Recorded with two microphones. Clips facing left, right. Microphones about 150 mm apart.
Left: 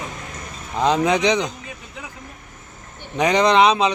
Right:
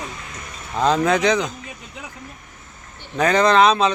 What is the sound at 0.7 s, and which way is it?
Speech, 15° left (ahead or behind).